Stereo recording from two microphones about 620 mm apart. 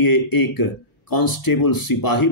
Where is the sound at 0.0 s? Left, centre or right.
Left.